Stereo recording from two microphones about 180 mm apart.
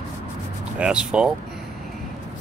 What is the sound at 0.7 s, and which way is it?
Music, 5° right (ahead or behind).